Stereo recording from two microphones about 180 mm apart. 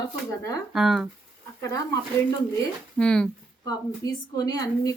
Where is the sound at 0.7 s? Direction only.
Centre (ahead or behind).